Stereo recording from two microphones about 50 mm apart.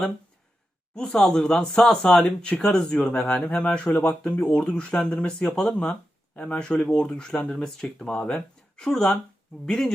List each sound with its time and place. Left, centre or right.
0.9 s speech: centre